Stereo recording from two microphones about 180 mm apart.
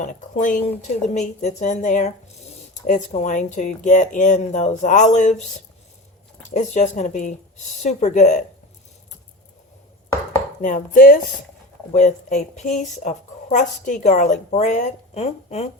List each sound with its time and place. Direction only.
0.0 s a woman's voice: 45° left (ahead or behind)
10.6 s a woman's voice: 50° left (ahead or behind)